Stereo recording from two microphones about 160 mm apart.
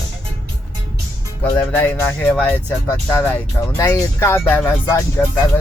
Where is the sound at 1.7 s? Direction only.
10° left (ahead or behind).